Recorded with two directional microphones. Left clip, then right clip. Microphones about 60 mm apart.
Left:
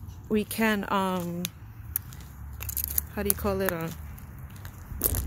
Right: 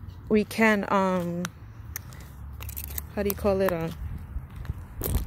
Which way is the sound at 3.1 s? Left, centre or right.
Right.